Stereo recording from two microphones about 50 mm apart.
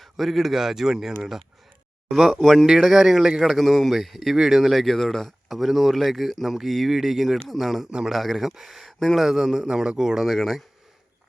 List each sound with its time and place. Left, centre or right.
0.0 s speech: centre
2.8 s speech: centre
7.9 s speech: centre
8.1 s speech: centre
8.9 s speech: centre
10.2 s speech: centre